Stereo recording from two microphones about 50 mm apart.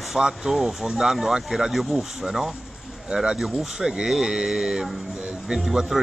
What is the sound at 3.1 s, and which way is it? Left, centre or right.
Speech, centre.